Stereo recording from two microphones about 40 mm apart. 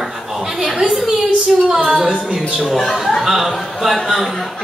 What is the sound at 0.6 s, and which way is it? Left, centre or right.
A man's voice, centre.